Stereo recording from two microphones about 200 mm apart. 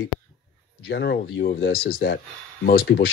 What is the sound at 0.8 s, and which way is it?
Speech, 55° left (ahead or behind).